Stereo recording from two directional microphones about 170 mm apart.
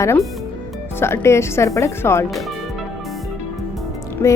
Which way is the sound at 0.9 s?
15° left (ahead or behind).